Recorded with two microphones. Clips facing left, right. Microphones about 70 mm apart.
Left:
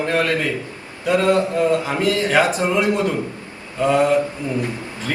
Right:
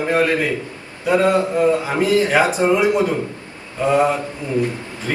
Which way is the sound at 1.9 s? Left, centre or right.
Right.